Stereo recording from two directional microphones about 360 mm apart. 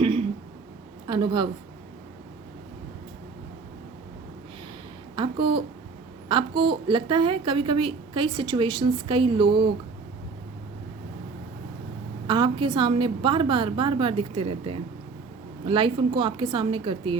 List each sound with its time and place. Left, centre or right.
0.0 s a sound: centre
1.0 s a woman's voice: centre
5.1 s a woman's voice: centre
12.3 s a woman's voice: centre